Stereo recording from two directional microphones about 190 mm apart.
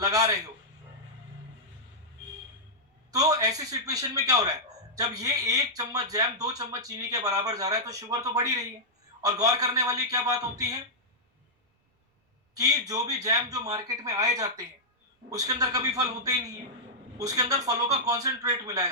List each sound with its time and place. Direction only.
0.0 s speech: 20° right (ahead or behind)
3.1 s speech: 20° right (ahead or behind)
12.5 s speech: 20° right (ahead or behind)